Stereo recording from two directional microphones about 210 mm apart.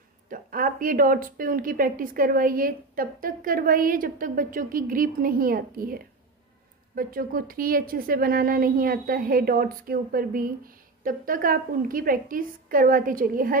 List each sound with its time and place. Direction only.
0.3 s a woman's voice: 40° right (ahead or behind)